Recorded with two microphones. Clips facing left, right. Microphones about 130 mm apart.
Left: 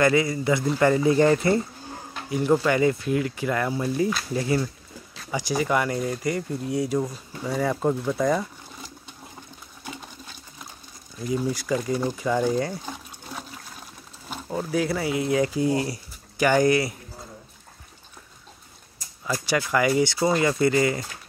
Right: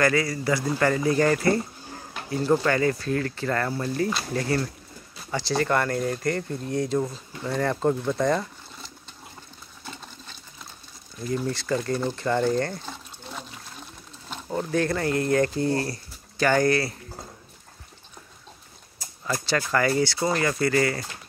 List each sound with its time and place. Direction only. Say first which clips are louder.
0.0 s speech: left 2 dB; 20° left (ahead or behind)
9.8 s sewing machine: left 3 dB; 10° left (ahead or behind)
11.1 s speech: left 2 dB; 10° left (ahead or behind)
19.4 s speech: left 1 dB; 15° left (ahead or behind)